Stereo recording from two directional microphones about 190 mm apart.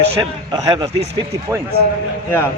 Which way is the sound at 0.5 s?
20° right (ahead or behind).